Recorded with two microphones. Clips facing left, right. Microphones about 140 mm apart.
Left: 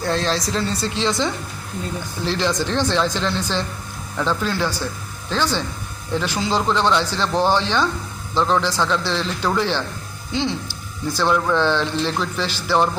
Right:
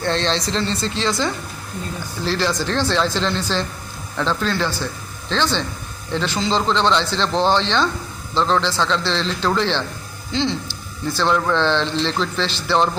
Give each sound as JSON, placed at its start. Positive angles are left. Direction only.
{"t": 0.0, "sound": "a man's voice", "side_deg": 5}